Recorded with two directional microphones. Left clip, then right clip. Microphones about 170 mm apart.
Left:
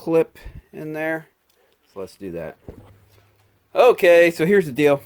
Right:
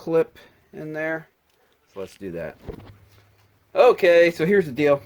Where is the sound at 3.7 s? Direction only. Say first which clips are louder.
Left 2 dB; 35° left (ahead or behind).